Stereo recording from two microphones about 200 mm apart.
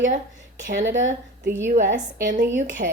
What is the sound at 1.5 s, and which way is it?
Speech, 15° right (ahead or behind).